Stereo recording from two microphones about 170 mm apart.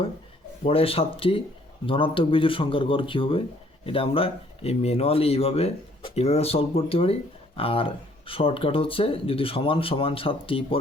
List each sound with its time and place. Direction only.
0.6 s speech: 35° left (ahead or behind)